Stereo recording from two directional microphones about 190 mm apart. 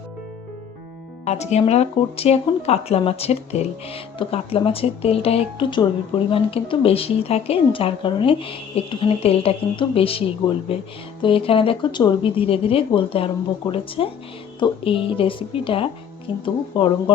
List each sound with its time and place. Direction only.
1.2 s speech: 35° left (ahead or behind)